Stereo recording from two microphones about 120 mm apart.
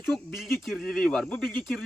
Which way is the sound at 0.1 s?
Centre (ahead or behind).